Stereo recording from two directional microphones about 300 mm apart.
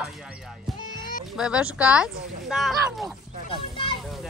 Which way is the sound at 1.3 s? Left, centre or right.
Centre.